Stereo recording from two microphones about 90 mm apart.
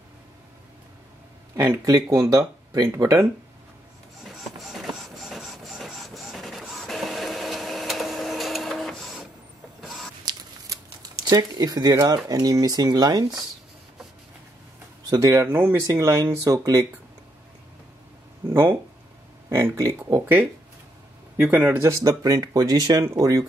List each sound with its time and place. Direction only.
1.9 s speech: 45° right (ahead or behind)
4.5 s printer: centre (ahead or behind)
11.2 s speech: 45° right (ahead or behind)
15.0 s speech: 40° right (ahead or behind)
15.4 s speech: 20° right (ahead or behind)
15.9 s speech: 35° right (ahead or behind)
18.5 s speech: 25° right (ahead or behind)
21.4 s speech: 20° right (ahead or behind)
21.8 s speech: 35° right (ahead or behind)